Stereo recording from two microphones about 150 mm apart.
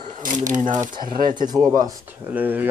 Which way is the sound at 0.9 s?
30° right (ahead or behind).